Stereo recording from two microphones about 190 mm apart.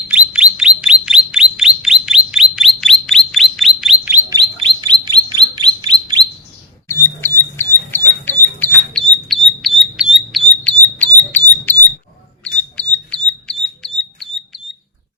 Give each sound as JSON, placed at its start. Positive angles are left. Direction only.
{"t": 0.1, "sound": "bird", "side_deg": -5}
{"t": 0.5, "sound": "chirp", "side_deg": -5}
{"t": 4.4, "sound": "chirp", "side_deg": -25}
{"t": 6.8, "sound": "a sound", "side_deg": 10}
{"t": 7.5, "sound": "creak", "side_deg": 10}
{"t": 8.9, "sound": "bird", "side_deg": 5}
{"t": 10.2, "sound": "a sound", "side_deg": 5}
{"t": 12.7, "sound": "bird", "side_deg": 5}